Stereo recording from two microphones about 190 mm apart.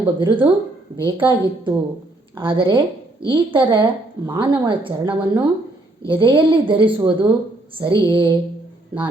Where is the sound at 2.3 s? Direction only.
25° right (ahead or behind).